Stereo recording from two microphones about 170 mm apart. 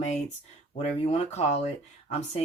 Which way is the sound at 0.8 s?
40° left (ahead or behind).